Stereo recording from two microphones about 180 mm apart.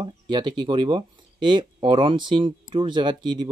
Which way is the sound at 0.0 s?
25° right (ahead or behind).